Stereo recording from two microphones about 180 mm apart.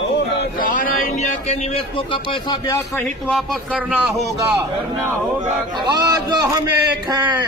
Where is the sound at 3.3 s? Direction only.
Centre (ahead or behind).